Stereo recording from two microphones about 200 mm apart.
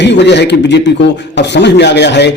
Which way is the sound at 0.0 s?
60° left (ahead or behind).